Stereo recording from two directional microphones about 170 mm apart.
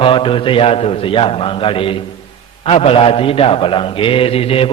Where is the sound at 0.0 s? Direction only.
30° left (ahead or behind).